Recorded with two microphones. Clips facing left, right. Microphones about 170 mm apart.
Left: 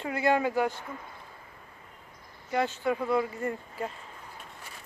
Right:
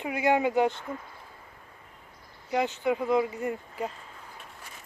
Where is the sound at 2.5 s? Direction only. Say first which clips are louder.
Right 1 dB; 20° right (ahead or behind).